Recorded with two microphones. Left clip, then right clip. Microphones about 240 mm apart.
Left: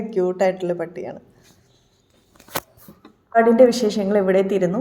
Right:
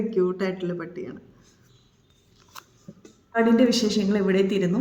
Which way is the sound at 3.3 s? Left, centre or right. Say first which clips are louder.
Left 7 dB; centre.